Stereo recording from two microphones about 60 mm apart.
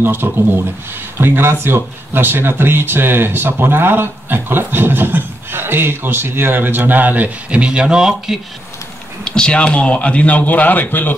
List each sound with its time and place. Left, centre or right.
0.0 s speech: right; by 8.4 s centre
9.2 s a man's voice: centre; by 11.1 s left